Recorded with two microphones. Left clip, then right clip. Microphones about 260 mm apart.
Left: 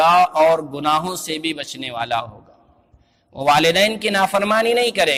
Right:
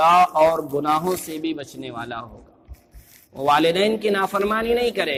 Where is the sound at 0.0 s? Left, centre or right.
Left.